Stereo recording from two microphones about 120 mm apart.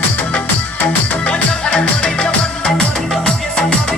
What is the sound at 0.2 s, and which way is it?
Music, 10° left (ahead or behind).